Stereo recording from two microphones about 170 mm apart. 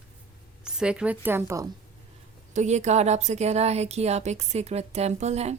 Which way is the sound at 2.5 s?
45° right (ahead or behind).